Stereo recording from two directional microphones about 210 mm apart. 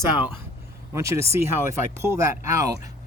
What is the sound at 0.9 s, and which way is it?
Speech, 15° right (ahead or behind).